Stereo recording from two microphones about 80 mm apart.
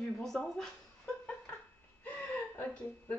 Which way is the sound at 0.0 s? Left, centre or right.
Centre.